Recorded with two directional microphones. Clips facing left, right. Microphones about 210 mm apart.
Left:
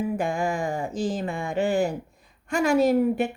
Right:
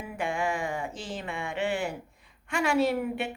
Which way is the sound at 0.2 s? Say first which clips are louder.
Left 4 dB; 40° left (ahead or behind).